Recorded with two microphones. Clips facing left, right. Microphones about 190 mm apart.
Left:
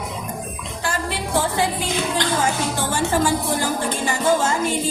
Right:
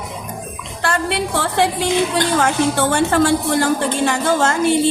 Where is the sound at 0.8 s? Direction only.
70° right (ahead or behind).